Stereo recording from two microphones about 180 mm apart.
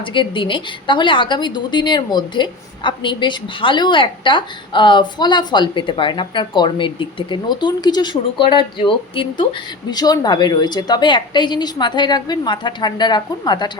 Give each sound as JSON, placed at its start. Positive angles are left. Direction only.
{"t": 0.0, "sound": "a woman's voice", "side_deg": 25}